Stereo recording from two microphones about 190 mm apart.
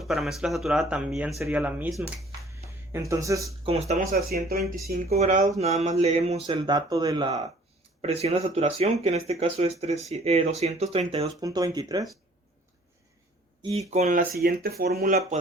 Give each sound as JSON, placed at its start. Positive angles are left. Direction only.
{"t": 0.0, "sound": "speech", "side_deg": 0}
{"t": 3.7, "sound": "speech", "side_deg": -35}
{"t": 5.0, "sound": "speech", "side_deg": -35}
{"t": 8.0, "sound": "speech", "side_deg": -35}
{"t": 11.3, "sound": "speech", "side_deg": -20}
{"t": 13.6, "sound": "speech", "side_deg": -30}